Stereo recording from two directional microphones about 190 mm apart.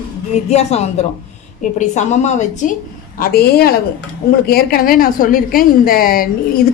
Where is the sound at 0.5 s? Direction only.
35° left (ahead or behind).